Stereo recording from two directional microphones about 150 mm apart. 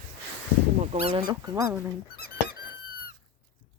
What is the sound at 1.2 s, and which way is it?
Speech, 30° right (ahead or behind).